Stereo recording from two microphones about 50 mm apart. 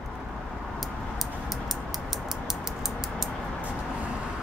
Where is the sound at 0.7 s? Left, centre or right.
Centre.